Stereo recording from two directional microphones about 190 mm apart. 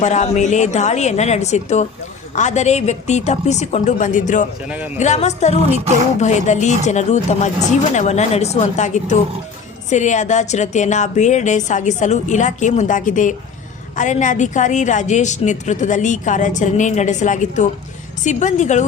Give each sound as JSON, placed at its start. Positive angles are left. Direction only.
{"t": 0.0, "sound": "a woman's voice", "side_deg": 40}